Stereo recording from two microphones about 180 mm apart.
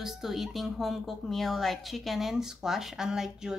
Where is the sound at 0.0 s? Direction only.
Centre (ahead or behind).